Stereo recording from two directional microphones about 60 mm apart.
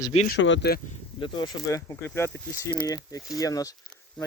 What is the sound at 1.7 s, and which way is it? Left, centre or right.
Speech, left.